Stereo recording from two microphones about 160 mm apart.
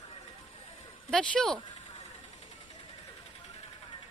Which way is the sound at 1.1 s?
5° left (ahead or behind).